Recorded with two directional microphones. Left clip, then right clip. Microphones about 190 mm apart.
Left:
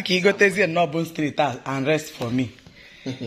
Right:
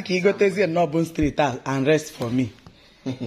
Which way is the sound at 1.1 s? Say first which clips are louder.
Right 1 dB; 25° right (ahead or behind).